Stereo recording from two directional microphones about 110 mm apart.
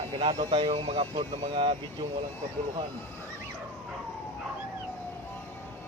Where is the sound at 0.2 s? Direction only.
55° right (ahead or behind).